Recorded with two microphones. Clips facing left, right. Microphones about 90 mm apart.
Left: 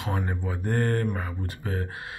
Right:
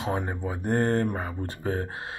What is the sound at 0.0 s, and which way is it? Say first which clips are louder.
Speech: right 2 dB; 20° right (ahead or behind).